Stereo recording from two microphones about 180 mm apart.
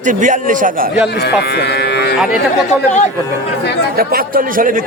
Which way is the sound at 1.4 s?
65° left (ahead or behind).